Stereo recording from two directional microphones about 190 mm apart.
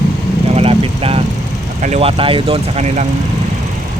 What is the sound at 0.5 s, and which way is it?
Vehicle, 35° right (ahead or behind).